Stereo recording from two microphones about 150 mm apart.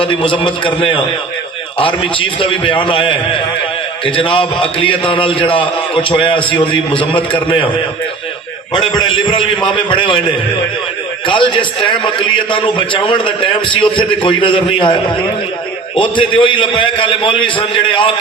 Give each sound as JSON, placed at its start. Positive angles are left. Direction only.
{"t": 0.0, "sound": "a man's voice", "side_deg": 35}
{"t": 8.9, "sound": "a man's voice", "side_deg": 30}
{"t": 11.3, "sound": "a man's voice", "side_deg": 35}
{"t": 16.0, "sound": "a man's voice", "side_deg": 35}